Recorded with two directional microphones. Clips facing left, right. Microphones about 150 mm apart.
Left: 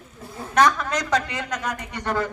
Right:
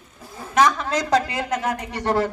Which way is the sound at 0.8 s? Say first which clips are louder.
Right 3 dB; 30° right (ahead or behind).